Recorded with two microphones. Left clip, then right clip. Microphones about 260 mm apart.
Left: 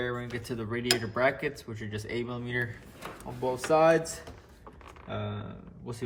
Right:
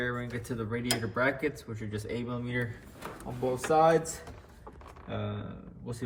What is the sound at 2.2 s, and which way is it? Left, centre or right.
Speech, left.